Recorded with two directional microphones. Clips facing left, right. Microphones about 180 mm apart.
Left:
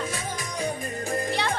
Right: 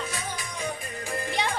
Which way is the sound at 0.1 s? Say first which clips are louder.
Left 3 dB; 40° left (ahead or behind).